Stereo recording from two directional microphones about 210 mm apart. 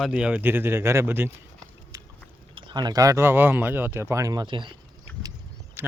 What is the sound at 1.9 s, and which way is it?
Biting, 15° right (ahead or behind).